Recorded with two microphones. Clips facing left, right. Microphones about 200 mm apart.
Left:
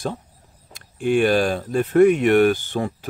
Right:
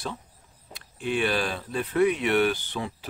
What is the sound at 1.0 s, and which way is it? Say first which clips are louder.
Speech: left 9 dB; 45° left (ahead or behind).